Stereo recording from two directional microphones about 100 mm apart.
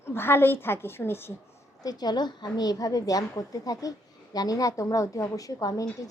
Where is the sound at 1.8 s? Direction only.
40° left (ahead or behind).